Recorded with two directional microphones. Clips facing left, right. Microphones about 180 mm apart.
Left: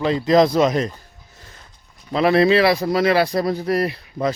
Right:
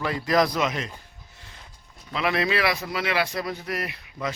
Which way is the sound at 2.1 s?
35° left (ahead or behind).